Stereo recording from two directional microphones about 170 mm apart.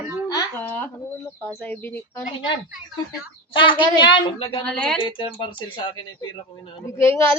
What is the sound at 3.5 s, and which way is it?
A woman's voice, 30° left (ahead or behind).